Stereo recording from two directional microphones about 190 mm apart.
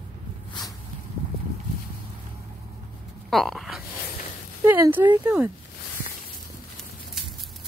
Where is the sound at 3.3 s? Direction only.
Centre (ahead or behind).